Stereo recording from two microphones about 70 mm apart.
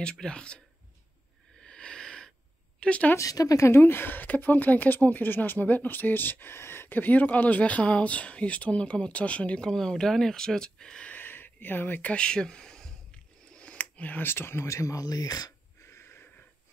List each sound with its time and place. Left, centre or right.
0.0 s speech: centre
1.6 s a sound: centre
2.8 s speech: centre
3.2 s speech: left; by 11.1 s centre
11.1 s a sound: left
15.8 s wheeze: left